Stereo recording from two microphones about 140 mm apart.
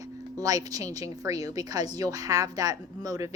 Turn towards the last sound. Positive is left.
turn(degrees=-25)  # may be behind; listen again after turning